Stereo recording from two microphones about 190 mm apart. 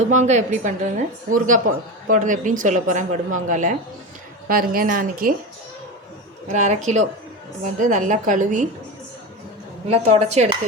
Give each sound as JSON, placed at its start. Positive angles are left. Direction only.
{"t": 0.1, "sound": "a woman's voice", "side_deg": -40}
{"t": 6.5, "sound": "speech", "side_deg": -40}
{"t": 9.9, "sound": "speech", "side_deg": -35}